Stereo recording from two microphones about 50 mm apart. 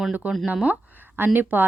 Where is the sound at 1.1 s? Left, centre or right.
Right.